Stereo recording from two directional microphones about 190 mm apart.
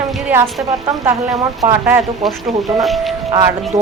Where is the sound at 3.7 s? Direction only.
15° right (ahead or behind).